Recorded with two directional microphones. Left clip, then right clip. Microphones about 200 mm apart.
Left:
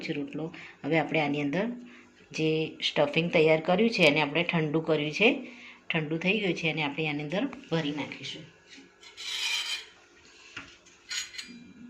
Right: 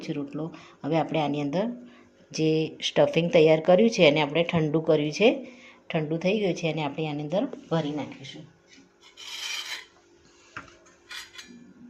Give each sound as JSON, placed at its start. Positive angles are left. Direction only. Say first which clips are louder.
{"t": 0.0, "sound": "speech", "louder": "right 1 dB", "side_deg": -45}
{"t": 7.7, "sound": "speech", "louder": "right 2 dB", "side_deg": -55}